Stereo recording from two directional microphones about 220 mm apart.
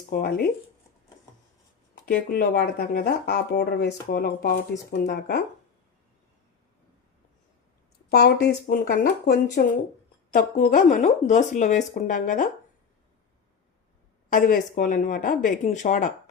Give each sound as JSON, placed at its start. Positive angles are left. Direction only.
{"t": 2.0, "sound": "speech", "side_deg": 40}
{"t": 8.1, "sound": "speech", "side_deg": 45}
{"t": 14.3, "sound": "speech", "side_deg": 35}